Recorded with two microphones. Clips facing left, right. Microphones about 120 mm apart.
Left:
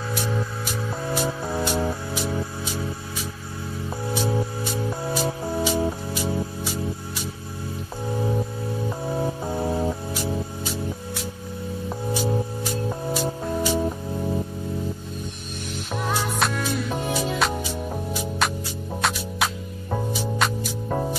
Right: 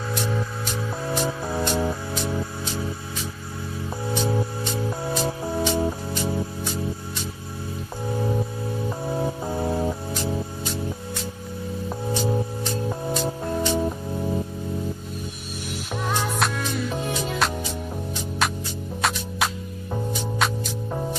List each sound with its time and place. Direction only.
0.7 s music: 5° left (ahead or behind)
4.1 s music: 5° left (ahead or behind)
8.4 s music: centre (ahead or behind)
12.3 s music: 5° left (ahead or behind)
16.1 s music: centre (ahead or behind)